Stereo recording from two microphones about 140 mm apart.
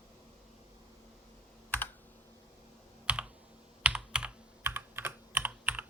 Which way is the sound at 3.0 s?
10° right (ahead or behind).